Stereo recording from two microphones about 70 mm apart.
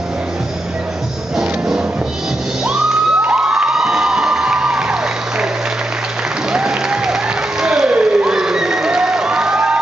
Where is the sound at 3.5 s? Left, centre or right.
Centre.